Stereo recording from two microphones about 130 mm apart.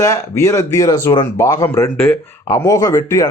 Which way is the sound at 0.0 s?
25° left (ahead or behind).